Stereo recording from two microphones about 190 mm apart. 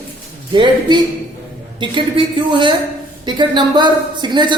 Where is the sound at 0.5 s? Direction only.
25° right (ahead or behind).